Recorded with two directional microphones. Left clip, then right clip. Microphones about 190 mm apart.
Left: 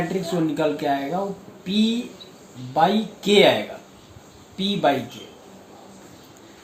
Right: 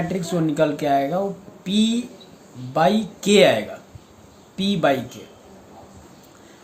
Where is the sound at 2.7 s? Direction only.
55° right (ahead or behind).